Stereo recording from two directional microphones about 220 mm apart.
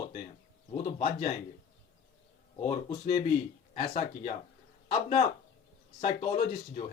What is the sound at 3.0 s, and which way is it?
A man's voice, 30° left (ahead or behind).